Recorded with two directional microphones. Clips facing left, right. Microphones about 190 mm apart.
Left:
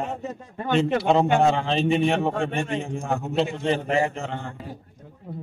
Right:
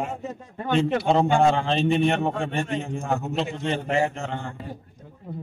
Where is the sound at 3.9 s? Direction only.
Centre (ahead or behind).